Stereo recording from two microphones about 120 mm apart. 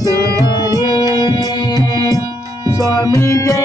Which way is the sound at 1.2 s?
35° left (ahead or behind).